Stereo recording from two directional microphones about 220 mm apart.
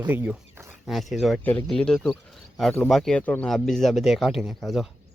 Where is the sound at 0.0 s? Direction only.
10° right (ahead or behind).